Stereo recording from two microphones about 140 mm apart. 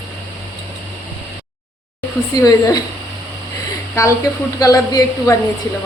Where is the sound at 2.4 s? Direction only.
25° left (ahead or behind).